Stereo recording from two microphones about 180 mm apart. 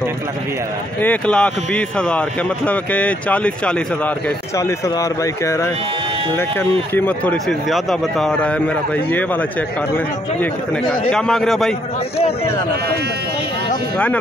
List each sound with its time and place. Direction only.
1.0 s speech: 5° left (ahead or behind)
4.6 s speech: 15° left (ahead or behind)
6.9 s a man's voice: 10° left (ahead or behind)